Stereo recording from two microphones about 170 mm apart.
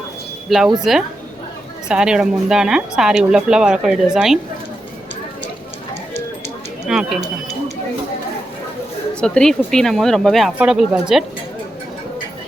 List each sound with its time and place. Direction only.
0.5 s a woman's voice: centre (ahead or behind)
6.8 s speech: 5° right (ahead or behind)
9.2 s a woman's voice: 5° left (ahead or behind)